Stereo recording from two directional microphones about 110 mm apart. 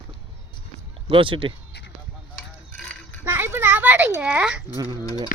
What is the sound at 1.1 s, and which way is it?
Speech, 50° right (ahead or behind).